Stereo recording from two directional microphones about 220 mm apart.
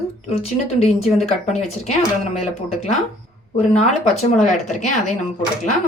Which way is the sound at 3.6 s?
30° left (ahead or behind).